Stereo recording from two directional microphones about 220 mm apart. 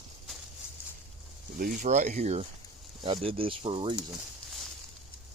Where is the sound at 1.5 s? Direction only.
40° right (ahead or behind).